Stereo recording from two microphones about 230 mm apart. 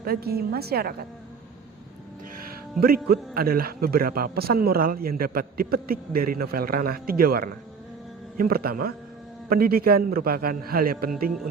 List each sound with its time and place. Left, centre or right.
0.0 s a woman's voice: right
2.8 s a man's voice: right